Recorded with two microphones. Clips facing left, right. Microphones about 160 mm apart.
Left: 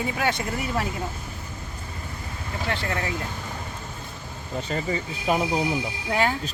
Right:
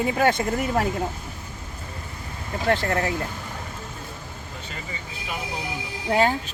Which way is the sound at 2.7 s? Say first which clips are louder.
Right 6 dB; 40° right (ahead or behind).